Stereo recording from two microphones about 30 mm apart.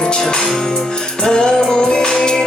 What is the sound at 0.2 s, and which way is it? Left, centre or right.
Music, left.